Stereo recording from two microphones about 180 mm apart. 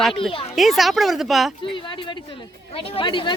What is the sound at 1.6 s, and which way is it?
Speech, 30° left (ahead or behind).